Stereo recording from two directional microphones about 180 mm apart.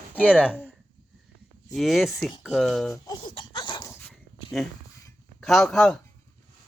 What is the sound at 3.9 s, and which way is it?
Dog, 15° left (ahead or behind).